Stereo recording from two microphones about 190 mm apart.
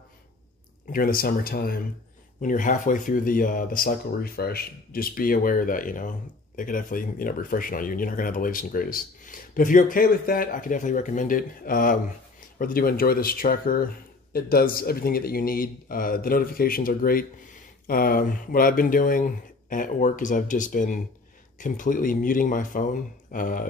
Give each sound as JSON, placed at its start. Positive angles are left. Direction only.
{"t": 0.8, "sound": "speech", "side_deg": 50}